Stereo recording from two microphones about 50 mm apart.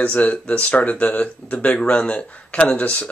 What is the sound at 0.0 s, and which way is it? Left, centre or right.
Speech, left.